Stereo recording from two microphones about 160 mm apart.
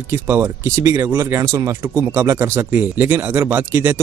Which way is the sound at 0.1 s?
15° right (ahead or behind).